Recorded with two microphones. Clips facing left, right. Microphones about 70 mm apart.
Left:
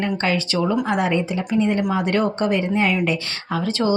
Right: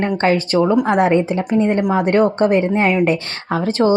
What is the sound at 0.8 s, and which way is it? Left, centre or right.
A woman's voice, right.